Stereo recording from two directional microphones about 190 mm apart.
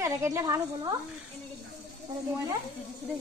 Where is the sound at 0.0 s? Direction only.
15° right (ahead or behind).